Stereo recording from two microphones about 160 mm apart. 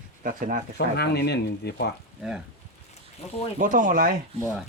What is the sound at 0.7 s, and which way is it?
Speech, 90° left.